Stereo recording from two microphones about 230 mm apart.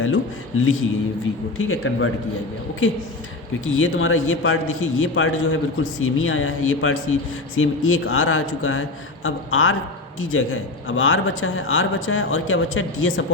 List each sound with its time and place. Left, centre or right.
0.0 s a man's voice: left